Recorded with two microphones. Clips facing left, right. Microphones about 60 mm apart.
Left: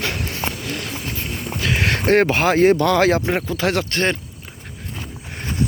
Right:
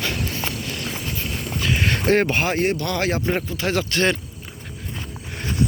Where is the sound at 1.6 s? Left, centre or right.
Left.